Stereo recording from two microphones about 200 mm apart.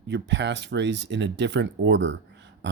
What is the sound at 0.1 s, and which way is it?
Speech, 60° right (ahead or behind).